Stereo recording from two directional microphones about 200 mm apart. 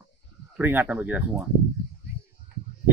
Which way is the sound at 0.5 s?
10° right (ahead or behind).